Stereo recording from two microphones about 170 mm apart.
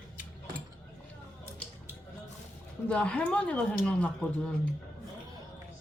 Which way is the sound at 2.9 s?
5° left (ahead or behind).